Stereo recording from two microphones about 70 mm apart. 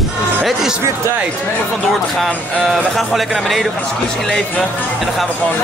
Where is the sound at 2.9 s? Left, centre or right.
Centre.